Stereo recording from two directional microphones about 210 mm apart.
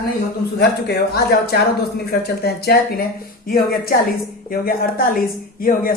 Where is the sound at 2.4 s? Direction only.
50° left (ahead or behind).